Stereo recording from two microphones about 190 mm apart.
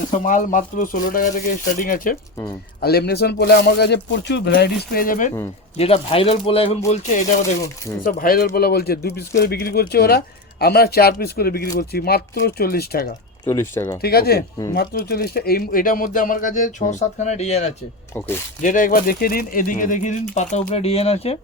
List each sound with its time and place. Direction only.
0.2 s speech: 40° left (ahead or behind)
5.7 s speech: 30° left (ahead or behind)
8.0 s speech: 50° left (ahead or behind)
13.4 s speech: 15° left (ahead or behind)
14.0 s speech: 55° left (ahead or behind); by 21.3 s 30° left (ahead or behind)